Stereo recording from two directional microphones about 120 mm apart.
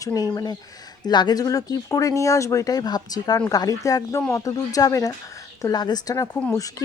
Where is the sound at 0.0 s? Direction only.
30° left (ahead or behind).